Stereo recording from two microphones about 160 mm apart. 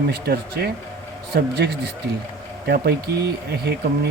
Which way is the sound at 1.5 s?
90° right.